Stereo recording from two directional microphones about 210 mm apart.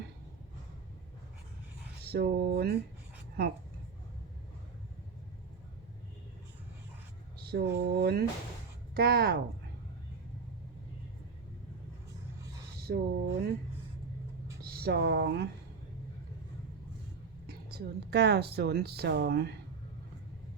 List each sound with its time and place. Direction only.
2.0 s speech: 50° right (ahead or behind)
7.3 s speech: 50° right (ahead or behind)
12.8 s speech: 50° right (ahead or behind)
14.6 s speech: 45° right (ahead or behind)
17.4 s speech: 50° right (ahead or behind)